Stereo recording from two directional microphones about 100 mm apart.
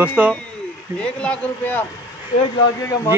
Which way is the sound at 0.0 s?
10° right (ahead or behind).